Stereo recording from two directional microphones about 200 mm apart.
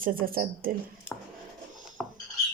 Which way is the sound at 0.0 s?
45° right (ahead or behind).